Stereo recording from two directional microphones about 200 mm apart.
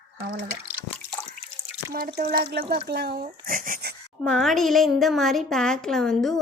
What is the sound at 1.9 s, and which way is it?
A woman's voice, 50° right (ahead or behind).